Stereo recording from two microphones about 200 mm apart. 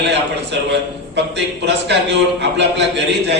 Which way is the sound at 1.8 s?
60° right (ahead or behind).